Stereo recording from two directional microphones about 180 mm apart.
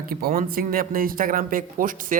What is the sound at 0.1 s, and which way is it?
Speech, 55° right (ahead or behind).